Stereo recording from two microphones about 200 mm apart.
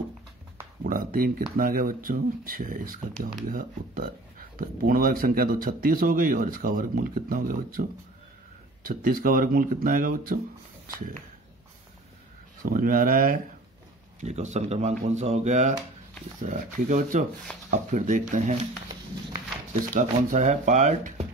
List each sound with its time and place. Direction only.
0.8 s speech: 45° right (ahead or behind)
12.6 s speech: 45° right (ahead or behind)
14.2 s speech: 35° right (ahead or behind)
19.9 s speech: 40° right (ahead or behind)